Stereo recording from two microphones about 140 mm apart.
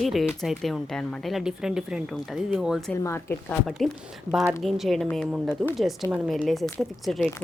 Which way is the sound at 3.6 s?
Centre (ahead or behind).